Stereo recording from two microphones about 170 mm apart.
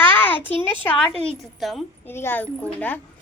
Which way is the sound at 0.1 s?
10° left (ahead or behind).